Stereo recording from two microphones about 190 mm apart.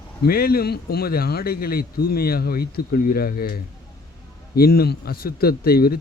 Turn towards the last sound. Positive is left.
turn(degrees=50)  # may be behind; listen again after turning